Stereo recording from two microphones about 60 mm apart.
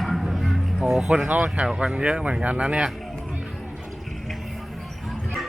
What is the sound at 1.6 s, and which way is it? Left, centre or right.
Speech, centre.